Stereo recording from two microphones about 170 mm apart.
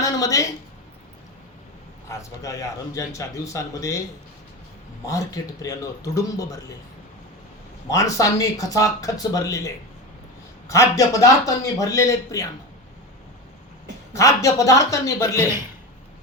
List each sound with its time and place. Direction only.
0.0 s a sound: 20° left (ahead or behind)
2.0 s a man's voice: 20° left (ahead or behind)
5.0 s speech: 20° left (ahead or behind)
7.9 s speech: 20° left (ahead or behind)
14.1 s speech: 20° left (ahead or behind)